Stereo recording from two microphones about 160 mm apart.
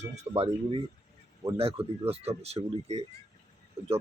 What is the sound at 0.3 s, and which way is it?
Speech, 30° right (ahead or behind).